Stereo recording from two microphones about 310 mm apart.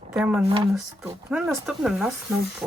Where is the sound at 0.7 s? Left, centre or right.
Centre.